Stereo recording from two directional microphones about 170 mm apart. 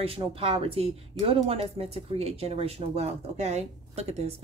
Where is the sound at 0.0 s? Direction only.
35° right (ahead or behind).